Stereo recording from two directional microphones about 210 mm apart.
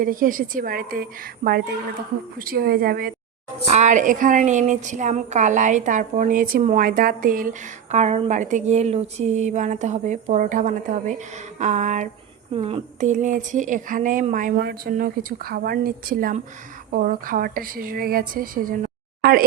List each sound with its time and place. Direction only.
0.0 s a woman's voice: 40° right (ahead or behind)
3.7 s a woman's voice: 35° right (ahead or behind)